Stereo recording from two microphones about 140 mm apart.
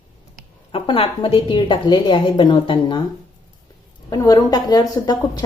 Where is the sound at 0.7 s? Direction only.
40° left (ahead or behind).